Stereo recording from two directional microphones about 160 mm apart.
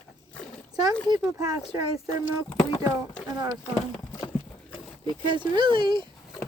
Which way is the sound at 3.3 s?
25° right (ahead or behind).